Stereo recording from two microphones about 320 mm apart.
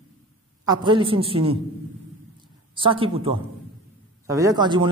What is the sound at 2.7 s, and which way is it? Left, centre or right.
A man's voice, centre.